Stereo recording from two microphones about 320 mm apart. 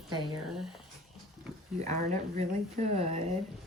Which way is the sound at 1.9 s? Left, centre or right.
Right.